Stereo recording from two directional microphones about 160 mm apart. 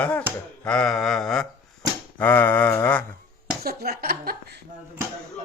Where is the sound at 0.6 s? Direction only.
5° left (ahead or behind).